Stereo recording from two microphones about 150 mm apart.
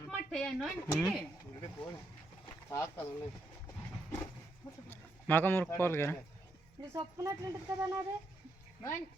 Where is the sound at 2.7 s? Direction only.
20° left (ahead or behind).